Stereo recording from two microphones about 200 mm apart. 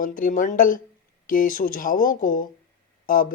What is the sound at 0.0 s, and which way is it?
Speech, 45° left (ahead or behind).